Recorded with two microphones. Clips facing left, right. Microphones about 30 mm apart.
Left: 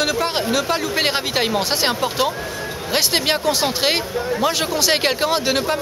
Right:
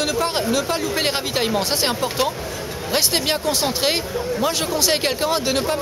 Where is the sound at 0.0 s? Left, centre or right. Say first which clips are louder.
Left 1 dB; centre.